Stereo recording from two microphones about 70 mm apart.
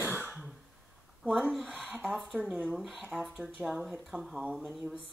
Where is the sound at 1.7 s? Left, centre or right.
Right.